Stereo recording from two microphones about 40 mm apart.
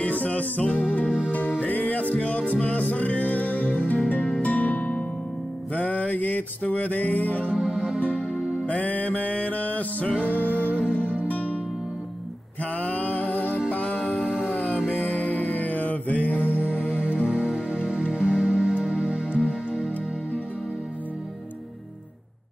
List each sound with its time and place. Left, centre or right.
0.0 s music: left
1.0 s music: right
1.3 s music: left
7.5 s music: centre
8.6 s music: left
10.7 s music: right
11.2 s music: left
12.7 s a sound: left
13.7 s music: left
15.0 s music: left
16.9 s music: right